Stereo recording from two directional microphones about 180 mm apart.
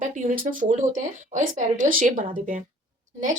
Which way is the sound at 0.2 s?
45° right (ahead or behind).